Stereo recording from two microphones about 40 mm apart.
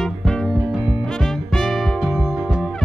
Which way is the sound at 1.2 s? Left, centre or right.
Centre.